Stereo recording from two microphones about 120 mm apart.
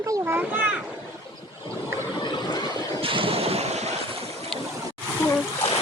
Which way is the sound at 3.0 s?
50° right (ahead or behind).